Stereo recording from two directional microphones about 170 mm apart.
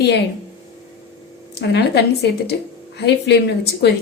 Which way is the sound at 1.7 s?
75° left (ahead or behind).